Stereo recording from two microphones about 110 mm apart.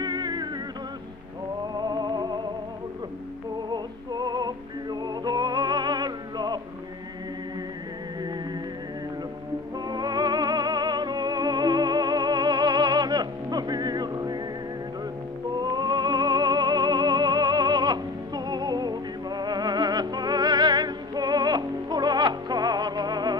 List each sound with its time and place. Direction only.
0.0 s music: 40° right (ahead or behind)
1.7 s music: 40° right (ahead or behind)
3.7 s music: 40° right (ahead or behind)
9.8 s music: 40° right (ahead or behind)
15.5 s music: 40° right (ahead or behind)